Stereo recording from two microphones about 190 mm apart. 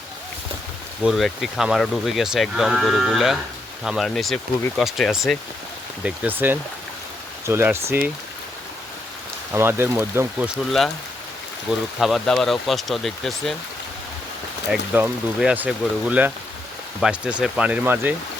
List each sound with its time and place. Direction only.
1.0 s speech: centre (ahead or behind)
9.5 s speech: 10° right (ahead or behind)
14.7 s speech: 5° right (ahead or behind)